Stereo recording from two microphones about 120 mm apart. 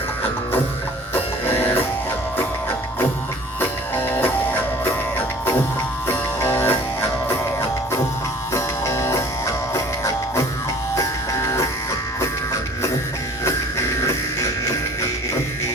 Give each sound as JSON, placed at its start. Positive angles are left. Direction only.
{"t": 1.1, "sound": "printer", "side_deg": 20}
{"t": 3.6, "sound": "music", "side_deg": 15}
{"t": 6.4, "sound": "music", "side_deg": 15}
{"t": 8.5, "sound": "music", "side_deg": 25}